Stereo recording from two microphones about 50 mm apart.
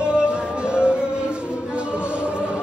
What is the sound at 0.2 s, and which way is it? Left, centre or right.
Music, centre.